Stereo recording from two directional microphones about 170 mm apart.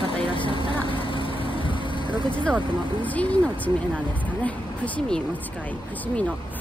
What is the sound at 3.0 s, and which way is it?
Speech, 10° left (ahead or behind).